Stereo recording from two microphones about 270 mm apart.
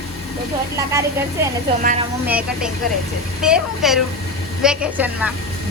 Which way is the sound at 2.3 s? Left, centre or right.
Centre.